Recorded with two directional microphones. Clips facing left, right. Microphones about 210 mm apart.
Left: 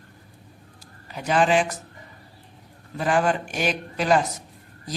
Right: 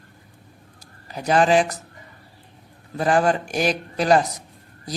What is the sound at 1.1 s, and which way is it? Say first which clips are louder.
Speech: right 3 dB; 40° right (ahead or behind).